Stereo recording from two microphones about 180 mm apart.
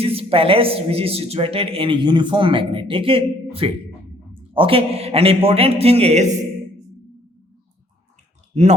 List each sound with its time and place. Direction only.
0.0 s speech: 30° right (ahead or behind)